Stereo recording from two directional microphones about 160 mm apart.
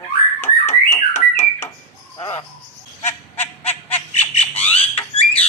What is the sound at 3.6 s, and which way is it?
Honk, 40° left (ahead or behind).